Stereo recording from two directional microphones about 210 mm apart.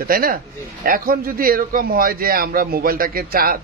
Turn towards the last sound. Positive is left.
turn(degrees=-45)  # may be behind; listen again after turning